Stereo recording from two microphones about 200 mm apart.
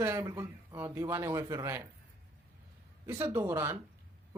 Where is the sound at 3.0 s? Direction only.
10° right (ahead or behind).